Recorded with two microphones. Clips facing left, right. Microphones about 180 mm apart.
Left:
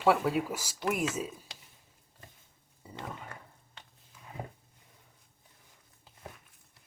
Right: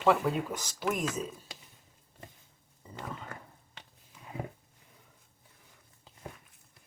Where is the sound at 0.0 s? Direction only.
5° left (ahead or behind).